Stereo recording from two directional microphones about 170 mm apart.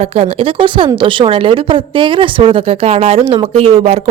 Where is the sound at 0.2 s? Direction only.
35° right (ahead or behind).